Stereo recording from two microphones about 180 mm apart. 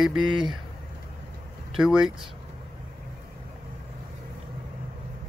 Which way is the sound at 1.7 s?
5° right (ahead or behind).